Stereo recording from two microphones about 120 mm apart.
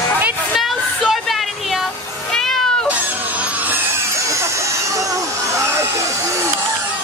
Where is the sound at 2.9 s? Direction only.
10° right (ahead or behind).